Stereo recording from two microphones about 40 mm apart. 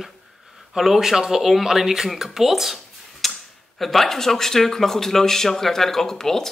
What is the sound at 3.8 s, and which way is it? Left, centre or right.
Speech, centre.